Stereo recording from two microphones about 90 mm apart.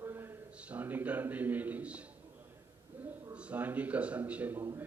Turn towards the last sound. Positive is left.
turn(degrees=-15)  # may be behind; listen again after turning